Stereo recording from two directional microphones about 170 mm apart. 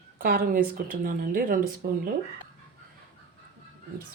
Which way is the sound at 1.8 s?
65° right (ahead or behind).